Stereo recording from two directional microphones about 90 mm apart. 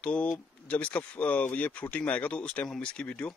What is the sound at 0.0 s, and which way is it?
Speech, 15° left (ahead or behind).